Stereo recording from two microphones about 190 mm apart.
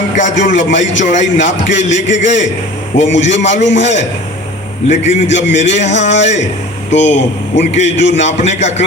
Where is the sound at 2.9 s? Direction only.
70° left (ahead or behind).